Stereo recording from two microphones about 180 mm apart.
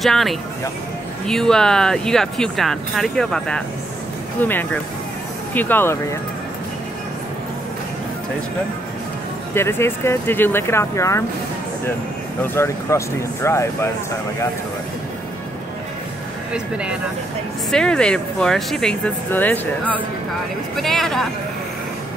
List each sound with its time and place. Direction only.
0.0 s speech: centre (ahead or behind)
9.5 s speech: 15° left (ahead or behind)
12.5 s speech: 15° left (ahead or behind)
16.5 s speech: 5° right (ahead or behind)